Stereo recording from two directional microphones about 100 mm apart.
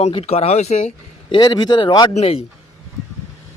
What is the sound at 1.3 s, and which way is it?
Speech, 40° left (ahead or behind).